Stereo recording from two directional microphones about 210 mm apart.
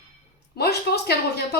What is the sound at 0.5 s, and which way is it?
Speech, 50° left (ahead or behind).